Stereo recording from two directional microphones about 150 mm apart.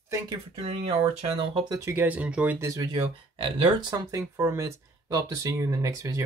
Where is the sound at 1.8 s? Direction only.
15° right (ahead or behind).